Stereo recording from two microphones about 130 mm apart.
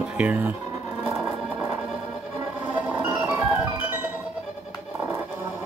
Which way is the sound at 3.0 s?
10° right (ahead or behind).